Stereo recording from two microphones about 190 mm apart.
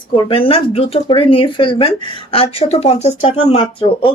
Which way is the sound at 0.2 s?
30° left (ahead or behind).